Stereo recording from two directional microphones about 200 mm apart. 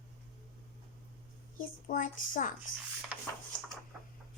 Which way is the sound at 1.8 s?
40° left (ahead or behind).